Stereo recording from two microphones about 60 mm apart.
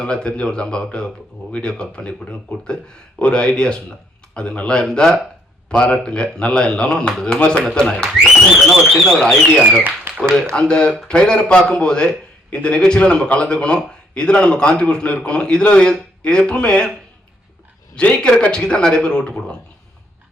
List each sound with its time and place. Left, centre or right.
0.0 s a man's voice: centre
3.2 s a man's voice: centre
8.1 s speech: centre
9.1 s a man's voice: centre
17.9 s a man's voice: centre